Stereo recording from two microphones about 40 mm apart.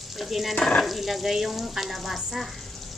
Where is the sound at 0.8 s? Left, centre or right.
Centre.